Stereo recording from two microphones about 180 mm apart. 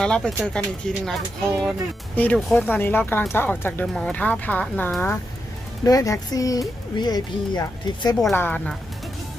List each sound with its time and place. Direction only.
0.0 s speech: 5° left (ahead or behind); by 8.1 s 20° left (ahead or behind)
8.3 s speech: 10° left (ahead or behind)